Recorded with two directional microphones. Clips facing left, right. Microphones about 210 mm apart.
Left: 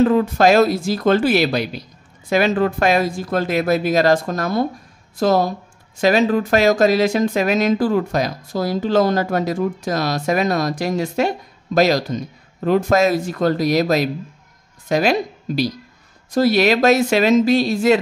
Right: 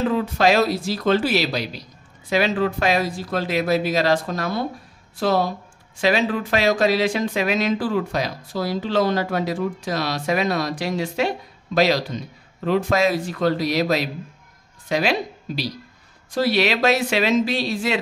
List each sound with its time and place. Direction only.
0.0 s speech: 45° left (ahead or behind)